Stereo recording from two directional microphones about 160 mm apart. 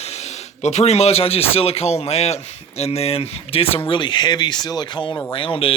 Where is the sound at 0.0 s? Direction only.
45° left (ahead or behind).